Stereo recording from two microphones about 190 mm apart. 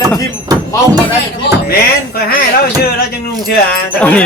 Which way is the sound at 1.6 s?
55° left (ahead or behind).